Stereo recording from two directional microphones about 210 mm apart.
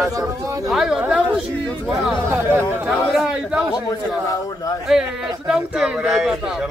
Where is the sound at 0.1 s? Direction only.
15° right (ahead or behind).